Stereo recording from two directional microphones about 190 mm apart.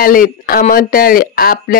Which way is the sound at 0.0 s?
50° left (ahead or behind).